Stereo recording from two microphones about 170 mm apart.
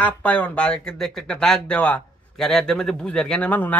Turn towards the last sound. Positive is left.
turn(degrees=10)  # may be behind; listen again after turning